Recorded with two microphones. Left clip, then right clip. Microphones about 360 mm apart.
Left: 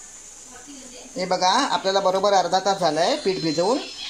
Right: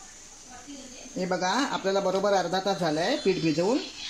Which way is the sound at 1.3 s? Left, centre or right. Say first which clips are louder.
Left 8 dB; left.